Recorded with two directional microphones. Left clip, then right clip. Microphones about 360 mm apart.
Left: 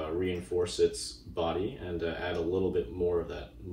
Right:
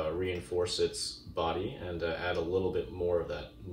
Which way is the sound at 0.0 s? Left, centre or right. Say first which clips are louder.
Even; centre.